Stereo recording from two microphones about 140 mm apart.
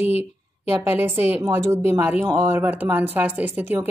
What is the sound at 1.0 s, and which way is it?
A woman's voice, 15° right (ahead or behind).